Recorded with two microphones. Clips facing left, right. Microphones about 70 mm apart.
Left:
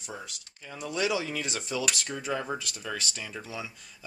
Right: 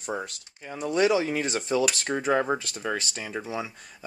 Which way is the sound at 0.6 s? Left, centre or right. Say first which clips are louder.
Right 7 dB; right.